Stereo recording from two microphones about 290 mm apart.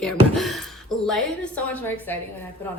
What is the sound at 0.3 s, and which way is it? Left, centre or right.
A woman's voice, centre.